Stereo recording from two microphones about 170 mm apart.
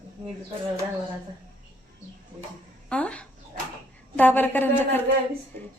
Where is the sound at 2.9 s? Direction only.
5° left (ahead or behind).